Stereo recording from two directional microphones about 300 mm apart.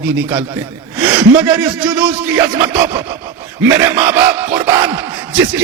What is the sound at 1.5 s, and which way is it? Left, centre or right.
Speech, centre.